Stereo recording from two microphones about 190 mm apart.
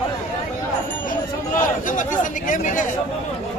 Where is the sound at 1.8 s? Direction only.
45° left (ahead or behind).